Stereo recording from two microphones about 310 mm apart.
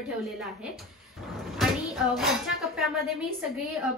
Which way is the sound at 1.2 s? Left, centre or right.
Centre.